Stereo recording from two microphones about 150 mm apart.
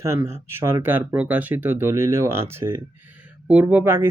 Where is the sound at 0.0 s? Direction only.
20° right (ahead or behind).